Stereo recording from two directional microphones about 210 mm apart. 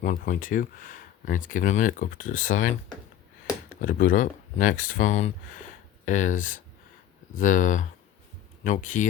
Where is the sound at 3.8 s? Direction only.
40° left (ahead or behind).